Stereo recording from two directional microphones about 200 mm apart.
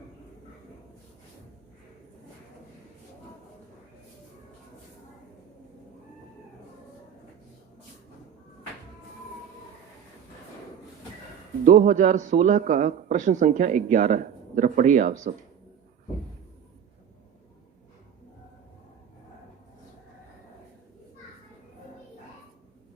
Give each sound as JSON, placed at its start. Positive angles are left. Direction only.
{"t": 11.6, "sound": "speech", "side_deg": -40}